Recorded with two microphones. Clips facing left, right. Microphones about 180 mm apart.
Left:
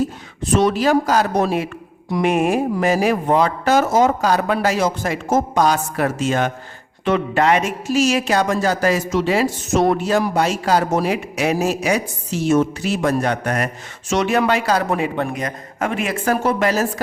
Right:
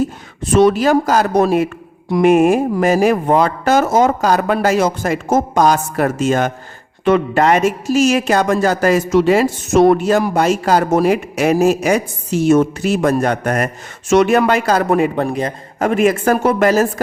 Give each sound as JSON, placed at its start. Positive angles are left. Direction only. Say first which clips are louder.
{"t": 0.6, "sound": "speech", "louder": "right 5 dB", "side_deg": -50}